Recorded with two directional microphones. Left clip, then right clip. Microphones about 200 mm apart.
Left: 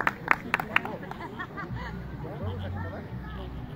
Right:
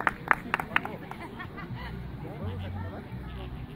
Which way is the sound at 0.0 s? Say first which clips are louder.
Left 1 dB; 40° right (ahead or behind).